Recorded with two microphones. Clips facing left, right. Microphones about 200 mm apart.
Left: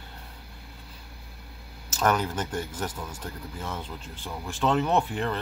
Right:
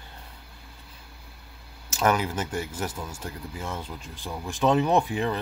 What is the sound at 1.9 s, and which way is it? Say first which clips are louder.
Speech: right 1 dB; 10° right (ahead or behind).